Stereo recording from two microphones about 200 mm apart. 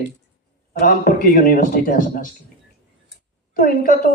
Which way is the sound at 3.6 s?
45° left (ahead or behind).